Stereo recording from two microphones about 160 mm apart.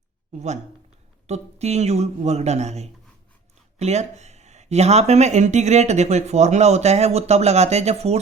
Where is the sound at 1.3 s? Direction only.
45° right (ahead or behind).